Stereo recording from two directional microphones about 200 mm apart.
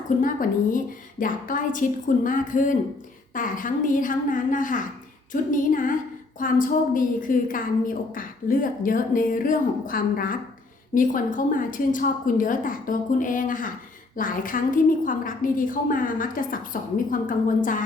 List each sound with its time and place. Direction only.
0.2 s a woman's voice: 40° left (ahead or behind)